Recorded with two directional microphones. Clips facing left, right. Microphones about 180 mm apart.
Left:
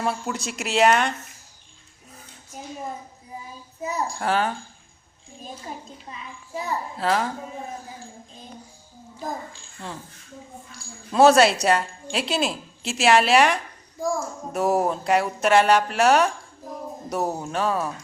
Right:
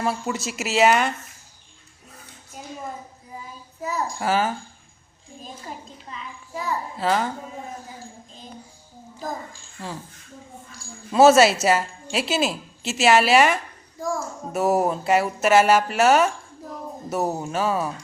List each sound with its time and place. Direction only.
0.0 s a woman's voice: centre (ahead or behind)
3.8 s a child's voice: 20° left (ahead or behind)
4.2 s a woman's voice: 5° right (ahead or behind)
6.9 s a woman's voice: centre (ahead or behind)
9.8 s a woman's voice: centre (ahead or behind)
11.1 s a woman's voice: centre (ahead or behind)